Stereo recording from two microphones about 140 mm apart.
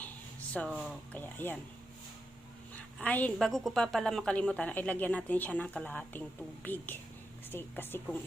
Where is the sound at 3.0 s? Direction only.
10° left (ahead or behind).